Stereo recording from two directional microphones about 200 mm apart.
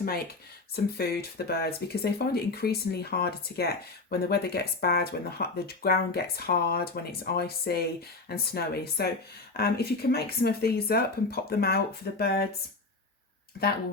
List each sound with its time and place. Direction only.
0.9 s speech: 50° left (ahead or behind)